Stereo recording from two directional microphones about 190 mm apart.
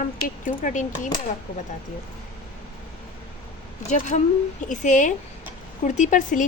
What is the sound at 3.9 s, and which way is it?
A woman's voice, 40° left (ahead or behind).